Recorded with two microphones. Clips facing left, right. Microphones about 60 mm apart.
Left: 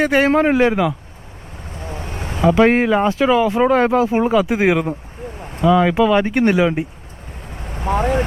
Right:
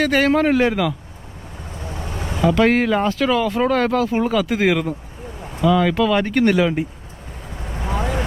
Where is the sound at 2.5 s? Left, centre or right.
Centre.